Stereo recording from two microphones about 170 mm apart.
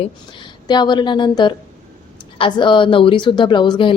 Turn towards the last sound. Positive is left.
turn(degrees=25)  # may be behind; listen again after turning